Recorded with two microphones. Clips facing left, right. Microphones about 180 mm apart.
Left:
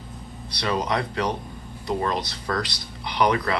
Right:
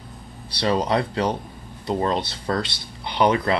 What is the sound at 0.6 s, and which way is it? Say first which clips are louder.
Speech: right 4 dB; 30° right (ahead or behind).